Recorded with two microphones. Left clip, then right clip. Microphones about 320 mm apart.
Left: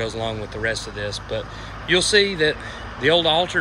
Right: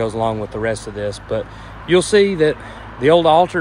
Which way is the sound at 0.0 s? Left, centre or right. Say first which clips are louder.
Right 7 dB; centre.